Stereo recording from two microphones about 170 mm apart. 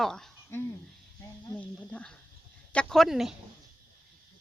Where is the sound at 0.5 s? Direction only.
15° left (ahead or behind); by 3.4 s centre (ahead or behind).